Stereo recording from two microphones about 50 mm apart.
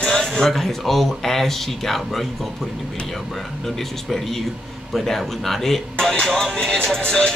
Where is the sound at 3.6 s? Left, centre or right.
Centre.